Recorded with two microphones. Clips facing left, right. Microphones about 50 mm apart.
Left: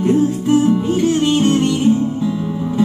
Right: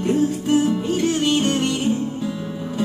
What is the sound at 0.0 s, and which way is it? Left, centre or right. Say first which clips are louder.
Music: left 5 dB; left.